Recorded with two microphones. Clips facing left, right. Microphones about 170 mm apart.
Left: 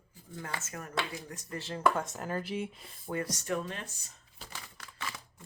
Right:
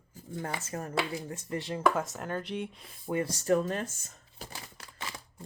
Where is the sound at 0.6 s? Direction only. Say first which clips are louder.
Right 6 dB; 30° right (ahead or behind).